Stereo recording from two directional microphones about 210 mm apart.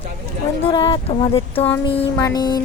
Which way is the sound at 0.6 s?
25° left (ahead or behind).